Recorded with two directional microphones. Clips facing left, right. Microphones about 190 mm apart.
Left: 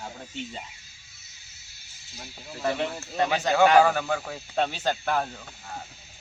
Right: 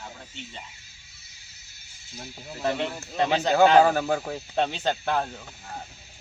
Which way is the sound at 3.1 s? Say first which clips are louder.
Right 2 dB; 25° right (ahead or behind).